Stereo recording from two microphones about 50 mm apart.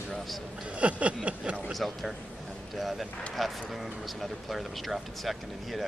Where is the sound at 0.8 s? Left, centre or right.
Right.